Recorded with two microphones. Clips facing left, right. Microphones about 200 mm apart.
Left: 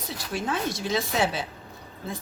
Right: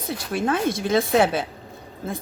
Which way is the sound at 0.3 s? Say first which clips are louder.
Right 6 dB; 55° right (ahead or behind).